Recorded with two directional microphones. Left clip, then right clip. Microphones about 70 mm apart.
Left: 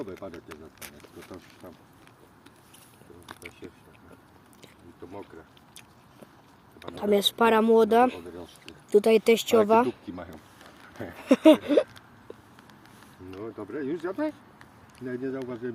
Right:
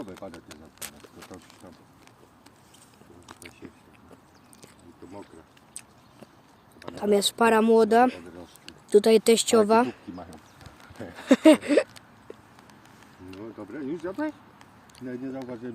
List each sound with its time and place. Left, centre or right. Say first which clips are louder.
0.0 s speech: left 2 dB; right
6.7 s speech: right 1 dB; right
8.6 s speech: right 2 dB; right
11.2 s a sound: right 1 dB; right
13.4 s speech: left 3 dB; centre